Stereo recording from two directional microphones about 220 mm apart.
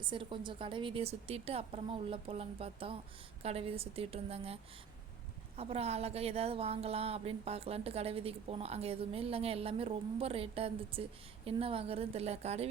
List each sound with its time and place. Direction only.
0.0 s speech: 20° right (ahead or behind)